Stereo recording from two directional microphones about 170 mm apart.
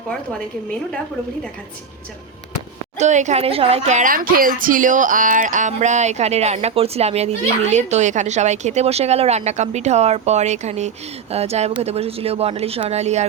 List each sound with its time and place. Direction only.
3.0 s a woman's voice: 45° right (ahead or behind)